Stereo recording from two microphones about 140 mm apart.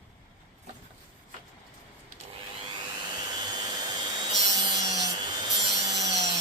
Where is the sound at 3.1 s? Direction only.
30° right (ahead or behind).